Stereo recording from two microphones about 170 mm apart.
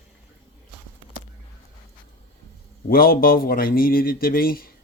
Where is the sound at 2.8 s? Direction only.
60° left (ahead or behind).